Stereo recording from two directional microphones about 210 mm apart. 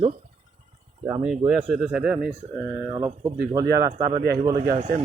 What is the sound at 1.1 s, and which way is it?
Speech, 10° right (ahead or behind).